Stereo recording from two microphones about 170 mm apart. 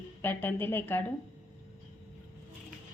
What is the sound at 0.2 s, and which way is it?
Speech, 10° left (ahead or behind).